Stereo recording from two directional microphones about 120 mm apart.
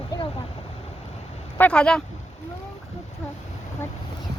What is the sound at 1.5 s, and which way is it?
Speech, 10° left (ahead or behind).